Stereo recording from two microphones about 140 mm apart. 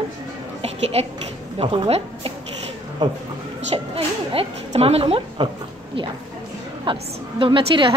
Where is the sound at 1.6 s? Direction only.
40° right (ahead or behind).